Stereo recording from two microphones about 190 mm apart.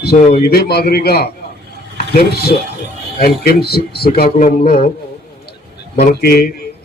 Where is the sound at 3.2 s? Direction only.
55° left (ahead or behind).